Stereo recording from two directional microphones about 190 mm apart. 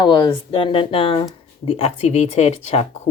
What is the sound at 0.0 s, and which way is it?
A woman's voice, 25° left (ahead or behind).